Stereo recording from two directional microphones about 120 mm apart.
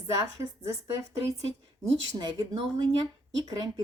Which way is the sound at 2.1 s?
35° right (ahead or behind).